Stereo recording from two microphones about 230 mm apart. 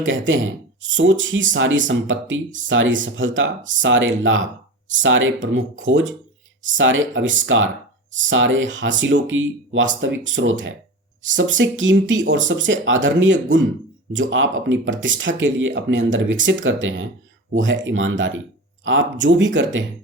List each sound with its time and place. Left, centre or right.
0.0 s speech: right